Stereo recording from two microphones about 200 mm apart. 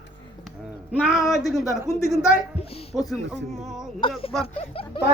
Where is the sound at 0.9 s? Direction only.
5° right (ahead or behind).